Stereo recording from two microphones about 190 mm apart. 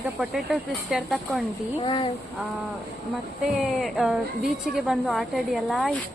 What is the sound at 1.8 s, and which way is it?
Speech, 25° left (ahead or behind).